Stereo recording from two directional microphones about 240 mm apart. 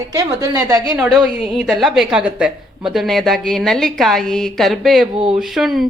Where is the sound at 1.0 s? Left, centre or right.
Centre.